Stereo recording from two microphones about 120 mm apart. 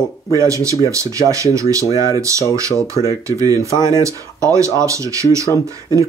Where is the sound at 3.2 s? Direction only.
25° right (ahead or behind).